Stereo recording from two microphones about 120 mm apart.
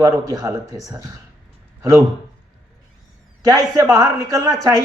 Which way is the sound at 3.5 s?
25° right (ahead or behind).